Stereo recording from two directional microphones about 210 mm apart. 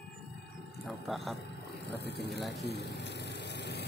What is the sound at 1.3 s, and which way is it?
Vehicle, 55° left (ahead or behind).